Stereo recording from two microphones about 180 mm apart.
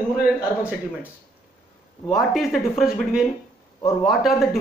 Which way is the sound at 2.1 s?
Centre (ahead or behind).